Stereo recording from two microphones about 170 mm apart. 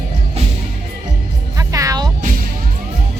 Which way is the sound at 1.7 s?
20° right (ahead or behind).